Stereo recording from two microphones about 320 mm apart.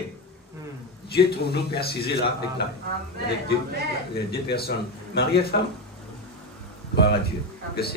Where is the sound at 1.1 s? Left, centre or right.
Left.